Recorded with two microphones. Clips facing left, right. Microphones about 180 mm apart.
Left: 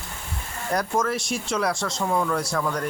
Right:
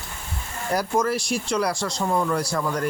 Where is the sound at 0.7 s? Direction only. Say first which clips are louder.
Right 2 dB; centre (ahead or behind).